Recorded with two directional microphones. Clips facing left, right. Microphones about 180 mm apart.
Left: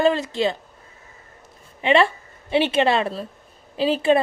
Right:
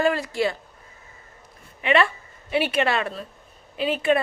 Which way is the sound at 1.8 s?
30° left (ahead or behind).